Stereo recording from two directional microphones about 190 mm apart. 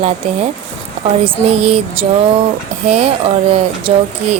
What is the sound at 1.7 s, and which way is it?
Speech, 30° right (ahead or behind).